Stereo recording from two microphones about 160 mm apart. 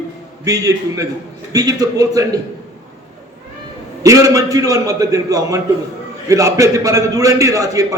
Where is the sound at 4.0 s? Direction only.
20° right (ahead or behind).